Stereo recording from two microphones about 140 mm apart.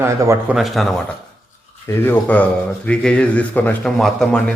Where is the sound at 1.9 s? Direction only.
15° left (ahead or behind).